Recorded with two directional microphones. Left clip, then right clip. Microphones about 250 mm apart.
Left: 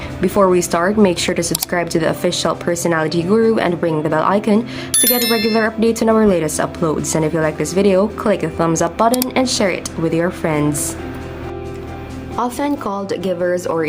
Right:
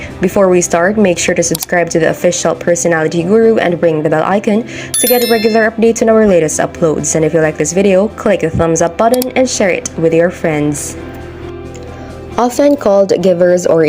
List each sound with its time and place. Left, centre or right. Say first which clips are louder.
0.2 s speech: right 4 dB; centre
12.4 s speech: right 10 dB; centre